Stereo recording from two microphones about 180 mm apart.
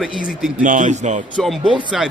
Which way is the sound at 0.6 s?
45° right (ahead or behind).